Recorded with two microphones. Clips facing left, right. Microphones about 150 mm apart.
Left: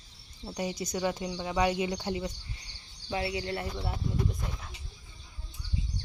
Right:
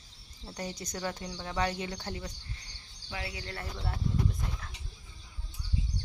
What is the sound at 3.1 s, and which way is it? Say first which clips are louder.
Speech: left 8 dB; 25° left (ahead or behind).